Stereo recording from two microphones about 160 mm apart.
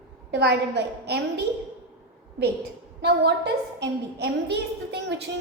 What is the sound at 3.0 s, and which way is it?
A woman's voice, 90° right.